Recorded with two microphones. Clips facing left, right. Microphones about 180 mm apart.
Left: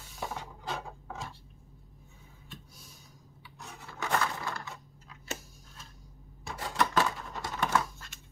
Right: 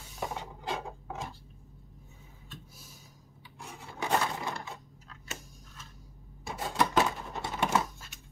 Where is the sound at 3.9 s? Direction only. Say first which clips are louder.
Right 1 dB; 25° right (ahead or behind).